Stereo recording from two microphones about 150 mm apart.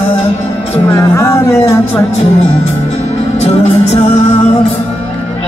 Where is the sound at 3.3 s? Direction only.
45° left (ahead or behind).